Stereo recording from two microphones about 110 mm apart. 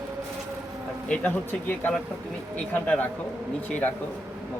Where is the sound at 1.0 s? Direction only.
10° left (ahead or behind).